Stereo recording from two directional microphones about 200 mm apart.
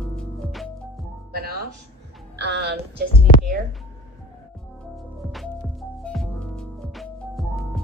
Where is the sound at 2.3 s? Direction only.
55° right (ahead or behind).